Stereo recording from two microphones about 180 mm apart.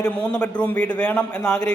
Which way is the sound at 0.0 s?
5° left (ahead or behind).